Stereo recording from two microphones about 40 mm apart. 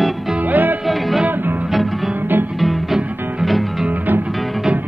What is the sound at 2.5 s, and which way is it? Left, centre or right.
Music, centre.